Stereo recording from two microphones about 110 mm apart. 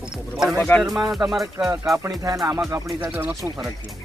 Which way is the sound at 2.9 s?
15° right (ahead or behind).